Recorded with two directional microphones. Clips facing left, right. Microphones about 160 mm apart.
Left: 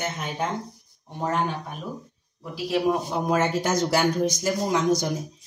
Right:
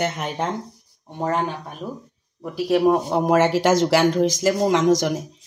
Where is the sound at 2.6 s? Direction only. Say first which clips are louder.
Right 6 dB; 55° right (ahead or behind).